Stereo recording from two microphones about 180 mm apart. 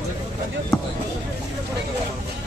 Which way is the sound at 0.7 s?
5° left (ahead or behind).